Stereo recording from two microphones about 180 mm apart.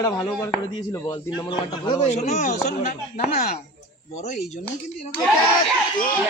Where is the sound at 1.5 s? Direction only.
30° left (ahead or behind).